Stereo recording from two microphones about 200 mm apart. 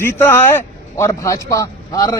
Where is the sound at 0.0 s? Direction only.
10° left (ahead or behind).